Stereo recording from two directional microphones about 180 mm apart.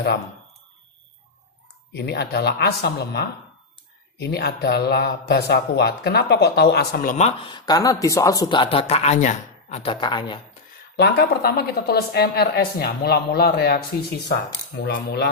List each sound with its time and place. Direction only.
1.9 s speech: 65° left (ahead or behind); by 7.3 s 45° left (ahead or behind)
7.3 s speech: 25° left (ahead or behind)
10.9 s speech: 65° left (ahead or behind)